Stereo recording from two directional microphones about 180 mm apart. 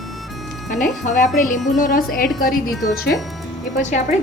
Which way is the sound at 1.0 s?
45° left (ahead or behind).